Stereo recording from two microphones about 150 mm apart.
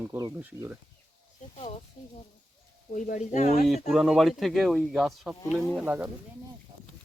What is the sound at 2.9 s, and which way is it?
Speech, 55° left (ahead or behind).